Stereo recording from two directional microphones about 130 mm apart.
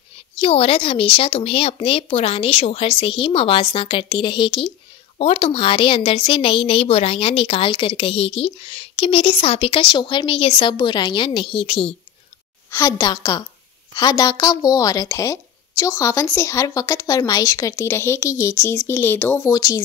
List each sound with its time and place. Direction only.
0.4 s a woman's voice: 45° left (ahead or behind)
12.7 s speech: 25° left (ahead or behind)
19.5 s speech: 30° left (ahead or behind)